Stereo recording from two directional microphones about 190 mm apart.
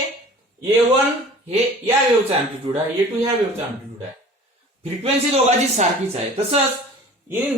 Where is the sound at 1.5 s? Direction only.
30° right (ahead or behind).